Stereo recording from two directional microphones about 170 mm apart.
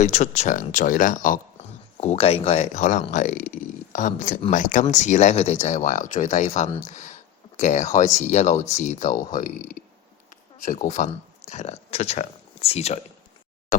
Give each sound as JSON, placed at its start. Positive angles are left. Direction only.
{"t": 0.0, "sound": "speech", "side_deg": 40}
{"t": 2.0, "sound": "speech", "side_deg": 35}